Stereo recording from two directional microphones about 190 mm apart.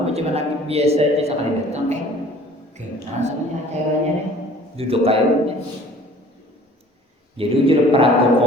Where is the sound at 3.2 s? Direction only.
35° right (ahead or behind).